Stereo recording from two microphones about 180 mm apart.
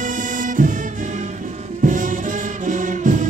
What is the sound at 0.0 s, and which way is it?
Music, 45° right (ahead or behind).